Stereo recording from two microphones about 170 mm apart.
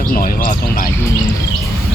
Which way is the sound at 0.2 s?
60° left (ahead or behind).